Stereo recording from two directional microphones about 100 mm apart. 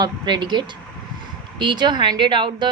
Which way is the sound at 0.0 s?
50° right (ahead or behind).